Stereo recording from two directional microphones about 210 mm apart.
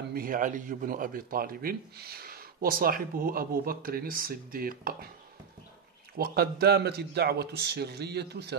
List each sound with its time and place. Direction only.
0.1 s a man's voice: 40° right (ahead or behind)
6.1 s a man's voice: 45° right (ahead or behind)